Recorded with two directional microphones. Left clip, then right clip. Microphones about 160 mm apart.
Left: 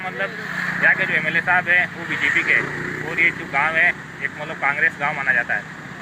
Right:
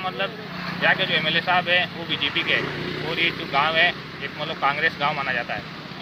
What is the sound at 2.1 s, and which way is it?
Speech, 20° left (ahead or behind).